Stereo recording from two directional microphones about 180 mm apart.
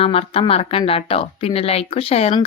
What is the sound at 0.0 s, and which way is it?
Speech, 30° left (ahead or behind).